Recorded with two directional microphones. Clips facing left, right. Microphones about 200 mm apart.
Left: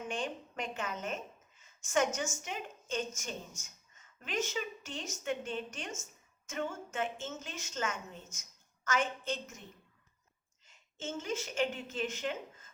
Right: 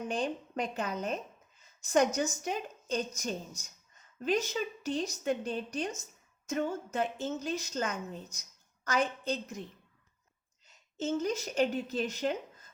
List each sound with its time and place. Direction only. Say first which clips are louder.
0.0 s a woman's voice: right 5 dB; 35° right (ahead or behind)
10.7 s a woman's voice: right 9 dB; 40° right (ahead or behind)